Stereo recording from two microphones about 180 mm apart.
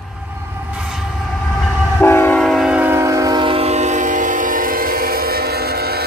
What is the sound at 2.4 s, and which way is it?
Train, centre (ahead or behind).